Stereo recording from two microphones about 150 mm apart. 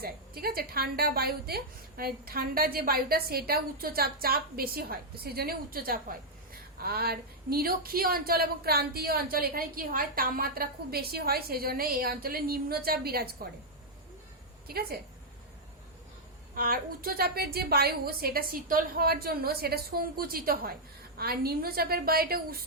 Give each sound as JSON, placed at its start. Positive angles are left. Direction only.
{"t": 0.0, "sound": "a woman's voice", "side_deg": -85}
{"t": 14.7, "sound": "a woman's voice", "side_deg": -90}
{"t": 16.6, "sound": "a woman's voice", "side_deg": -75}
{"t": 21.2, "sound": "a woman's voice", "side_deg": -90}